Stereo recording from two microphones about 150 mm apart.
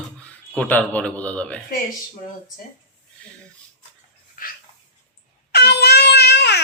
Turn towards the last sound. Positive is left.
turn(degrees=90)